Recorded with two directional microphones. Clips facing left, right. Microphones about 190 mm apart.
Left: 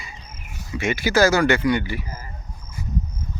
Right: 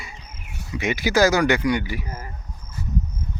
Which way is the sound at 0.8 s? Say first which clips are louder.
Even; 15° right (ahead or behind).